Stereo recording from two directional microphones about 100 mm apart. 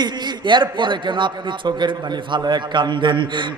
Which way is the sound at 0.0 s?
50° right (ahead or behind).